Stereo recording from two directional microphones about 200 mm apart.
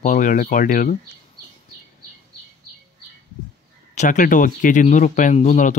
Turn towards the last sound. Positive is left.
turn(degrees=40)  # may be behind; listen again after turning